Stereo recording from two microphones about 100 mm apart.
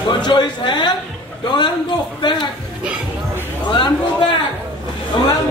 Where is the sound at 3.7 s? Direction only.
55° left (ahead or behind).